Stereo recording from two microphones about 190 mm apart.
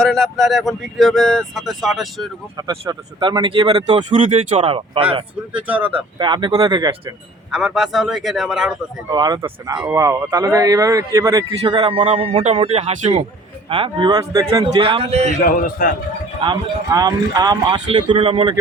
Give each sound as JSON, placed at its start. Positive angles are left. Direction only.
{"t": 0.0, "sound": "speech", "side_deg": 0}
{"t": 2.6, "sound": "speech", "side_deg": -20}
{"t": 5.5, "sound": "speech", "side_deg": -5}
{"t": 6.1, "sound": "speech", "side_deg": -25}
{"t": 7.5, "sound": "speech", "side_deg": 0}
{"t": 9.0, "sound": "a man's voice", "side_deg": -20}
{"t": 15.3, "sound": "a man's voice", "side_deg": 50}
{"t": 16.4, "sound": "speech", "side_deg": -20}